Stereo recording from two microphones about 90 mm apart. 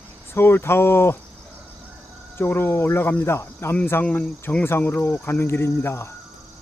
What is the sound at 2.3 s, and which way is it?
Speech, 25° left (ahead or behind).